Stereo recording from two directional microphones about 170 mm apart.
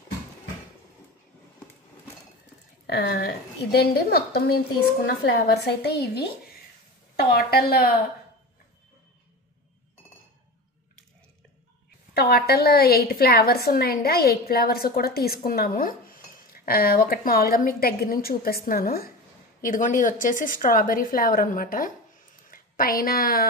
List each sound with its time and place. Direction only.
2.9 s a woman's voice: 65° left (ahead or behind)
7.2 s a woman's voice: 65° left (ahead or behind)
12.1 s a woman's voice: 70° left (ahead or behind)